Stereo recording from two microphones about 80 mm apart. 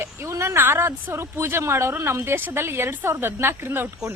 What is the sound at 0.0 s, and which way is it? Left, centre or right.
A woman's voice, right.